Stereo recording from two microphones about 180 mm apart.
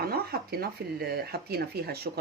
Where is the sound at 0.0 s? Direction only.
60° right (ahead or behind).